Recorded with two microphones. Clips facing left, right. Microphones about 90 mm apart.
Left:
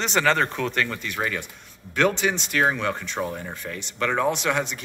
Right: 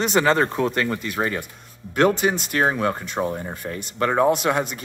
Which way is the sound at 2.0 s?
40° right (ahead or behind).